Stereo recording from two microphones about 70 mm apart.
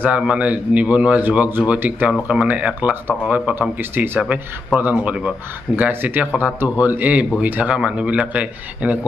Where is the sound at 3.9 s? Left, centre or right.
Right.